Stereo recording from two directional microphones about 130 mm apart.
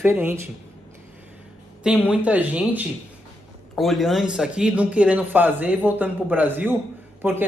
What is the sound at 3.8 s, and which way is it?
Speech, centre (ahead or behind).